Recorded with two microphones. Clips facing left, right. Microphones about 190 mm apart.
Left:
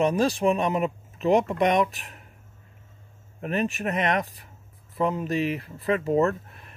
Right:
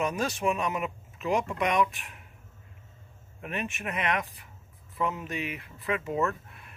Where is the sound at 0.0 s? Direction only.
30° left (ahead or behind).